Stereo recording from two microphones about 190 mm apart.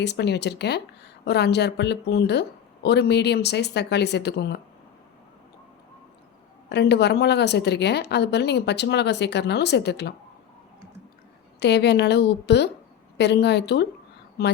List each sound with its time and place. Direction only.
0.0 s a woman's voice: 60° left (ahead or behind)
6.7 s a woman's voice: 60° left (ahead or behind)
11.6 s a woman's voice: 60° left (ahead or behind)